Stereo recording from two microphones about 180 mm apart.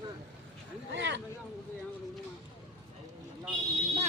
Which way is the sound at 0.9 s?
85° right.